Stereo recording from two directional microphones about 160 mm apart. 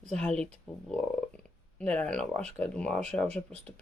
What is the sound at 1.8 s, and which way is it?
Speech, 5° left (ahead or behind).